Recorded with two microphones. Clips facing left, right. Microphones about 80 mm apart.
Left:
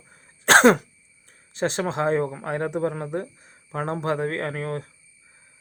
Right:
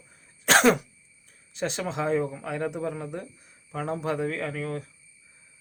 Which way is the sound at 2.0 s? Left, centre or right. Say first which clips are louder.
Left 3 dB; left.